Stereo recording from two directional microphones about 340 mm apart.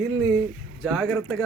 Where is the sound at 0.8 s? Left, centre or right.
Centre.